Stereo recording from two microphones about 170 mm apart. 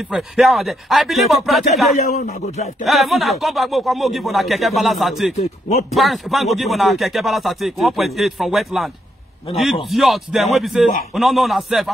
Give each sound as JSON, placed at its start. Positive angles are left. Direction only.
{"t": 0.1, "sound": "speech", "side_deg": 0}
{"t": 2.0, "sound": "a man's voice", "side_deg": 50}
{"t": 2.8, "sound": "speech", "side_deg": 0}
{"t": 5.3, "sound": "a man's voice", "side_deg": 40}
{"t": 5.9, "sound": "speech", "side_deg": 0}